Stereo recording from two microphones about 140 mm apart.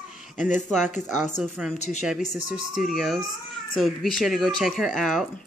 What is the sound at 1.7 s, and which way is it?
Speech, 55° left (ahead or behind).